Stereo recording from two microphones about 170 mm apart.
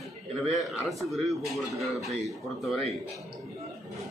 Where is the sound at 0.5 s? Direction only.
Centre (ahead or behind).